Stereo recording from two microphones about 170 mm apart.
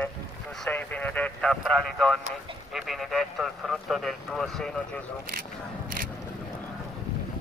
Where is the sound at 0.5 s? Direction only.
5° left (ahead or behind).